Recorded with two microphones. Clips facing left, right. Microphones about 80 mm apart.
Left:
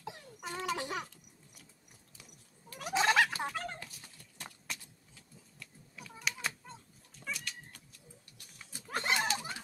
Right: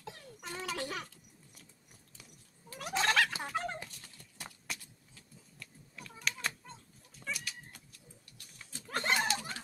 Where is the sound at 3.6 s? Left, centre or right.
Centre.